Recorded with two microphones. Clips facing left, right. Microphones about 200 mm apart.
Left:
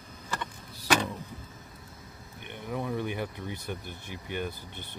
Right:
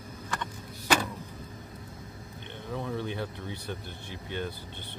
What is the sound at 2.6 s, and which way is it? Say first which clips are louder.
Speech: left 2 dB; 10° left (ahead or behind).